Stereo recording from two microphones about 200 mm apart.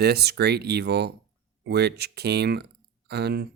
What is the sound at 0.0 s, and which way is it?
Speech, 55° right (ahead or behind).